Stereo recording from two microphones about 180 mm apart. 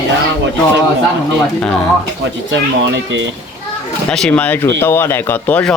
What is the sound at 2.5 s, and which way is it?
Speech, 90° right.